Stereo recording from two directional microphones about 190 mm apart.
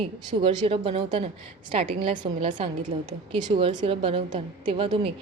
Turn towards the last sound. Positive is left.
turn(degrees=-30)  # may be behind; listen again after turning